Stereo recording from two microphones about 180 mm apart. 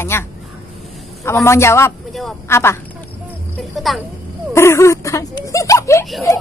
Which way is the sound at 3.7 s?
Centre (ahead or behind).